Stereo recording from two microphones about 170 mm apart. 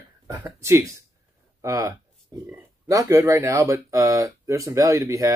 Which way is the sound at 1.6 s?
20° right (ahead or behind).